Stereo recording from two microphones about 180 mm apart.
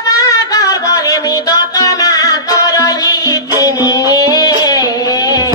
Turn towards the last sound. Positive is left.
turn(degrees=20)  # may be behind; listen again after turning